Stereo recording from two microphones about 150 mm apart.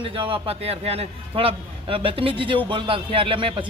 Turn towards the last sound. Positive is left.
turn(degrees=-35)  # may be behind; listen again after turning